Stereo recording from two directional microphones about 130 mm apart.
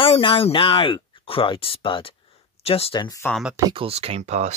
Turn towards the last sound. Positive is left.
turn(degrees=-60)  # may be behind; listen again after turning